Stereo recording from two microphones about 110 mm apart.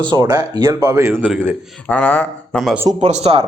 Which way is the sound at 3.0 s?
90° right.